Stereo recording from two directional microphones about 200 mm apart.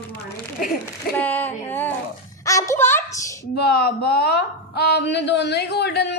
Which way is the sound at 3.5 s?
50° left (ahead or behind).